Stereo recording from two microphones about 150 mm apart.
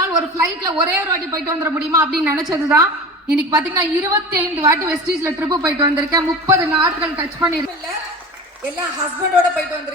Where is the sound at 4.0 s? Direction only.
20° right (ahead or behind).